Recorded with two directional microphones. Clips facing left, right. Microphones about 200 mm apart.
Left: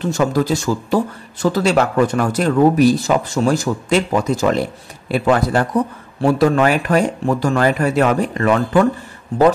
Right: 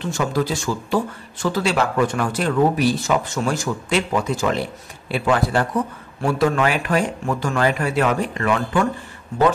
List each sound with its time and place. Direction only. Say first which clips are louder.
0.0 s a man's voice: left 5 dB; 40° left (ahead or behind)